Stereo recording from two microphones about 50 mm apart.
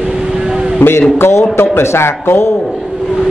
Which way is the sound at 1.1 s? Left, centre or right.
Left.